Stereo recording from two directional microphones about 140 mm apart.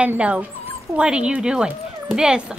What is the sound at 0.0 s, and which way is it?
Speech, 10° right (ahead or behind).